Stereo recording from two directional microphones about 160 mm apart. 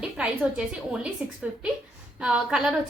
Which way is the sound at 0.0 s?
5° right (ahead or behind).